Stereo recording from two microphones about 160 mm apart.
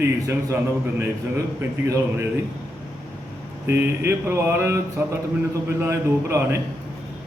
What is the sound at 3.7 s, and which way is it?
A man's voice, 15° right (ahead or behind).